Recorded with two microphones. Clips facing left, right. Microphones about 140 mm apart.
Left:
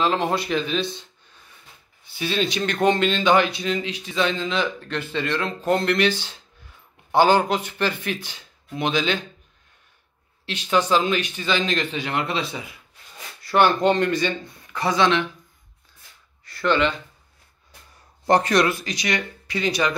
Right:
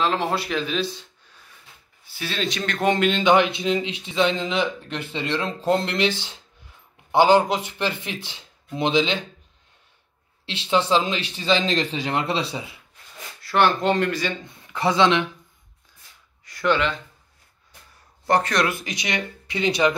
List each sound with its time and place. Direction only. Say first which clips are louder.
0.0 s speech: left 1 dB; centre (ahead or behind)
2.0 s speech: left 4 dB; centre (ahead or behind)
3.2 s speech: right 1 dB; 20° right (ahead or behind)
10.4 s speech: even; 25° right (ahead or behind)
13.5 s speech: left 2 dB; centre (ahead or behind)
14.7 s speech: right 1 dB; 20° right (ahead or behind)
16.4 s speech: left 1 dB; 10° right (ahead or behind)
18.2 s speech: left 2 dB; 20° left (ahead or behind)
18.7 s speech: left 3 dB; 20° right (ahead or behind)